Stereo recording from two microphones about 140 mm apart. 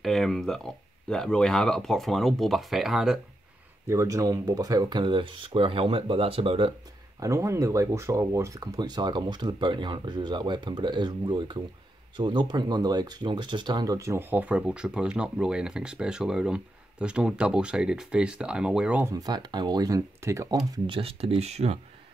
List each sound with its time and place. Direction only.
0.0 s speech: centre (ahead or behind)
3.8 s speech: 20° right (ahead or behind); by 6.7 s 40° right (ahead or behind)
7.2 s speech: 20° right (ahead or behind)
19.0 s speech: 25° right (ahead or behind); by 21.7 s 50° right (ahead or behind)